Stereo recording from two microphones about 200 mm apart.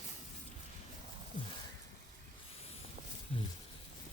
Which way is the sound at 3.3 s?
30° left (ahead or behind).